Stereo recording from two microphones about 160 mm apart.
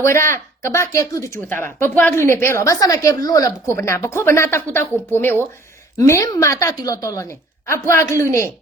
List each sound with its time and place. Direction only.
0.0 s a woman's voice: 15° left (ahead or behind)